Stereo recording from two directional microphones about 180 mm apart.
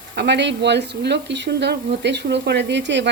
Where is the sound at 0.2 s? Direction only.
75° right (ahead or behind).